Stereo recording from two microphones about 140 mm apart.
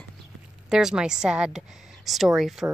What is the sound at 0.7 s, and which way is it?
Speech, 5° right (ahead or behind).